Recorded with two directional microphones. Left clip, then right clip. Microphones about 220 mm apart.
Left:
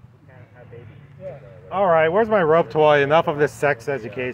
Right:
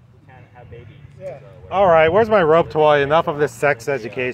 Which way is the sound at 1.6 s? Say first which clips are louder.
Right 4 dB; 15° right (ahead or behind).